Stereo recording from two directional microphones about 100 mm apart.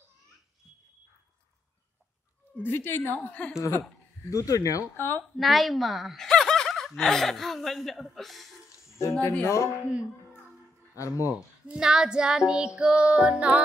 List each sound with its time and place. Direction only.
2.5 s a woman's voice: 20° left (ahead or behind)
4.3 s speech: 35° left (ahead or behind)
5.4 s speech: centre (ahead or behind)
8.7 s a sound: 30° left (ahead or behind)
9.4 s a woman's voice: 30° left (ahead or behind)
11.0 s speech: 30° left (ahead or behind)
11.3 s child singing: 10° right (ahead or behind)